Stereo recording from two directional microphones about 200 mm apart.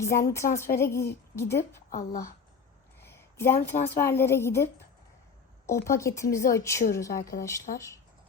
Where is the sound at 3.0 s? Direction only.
10° left (ahead or behind).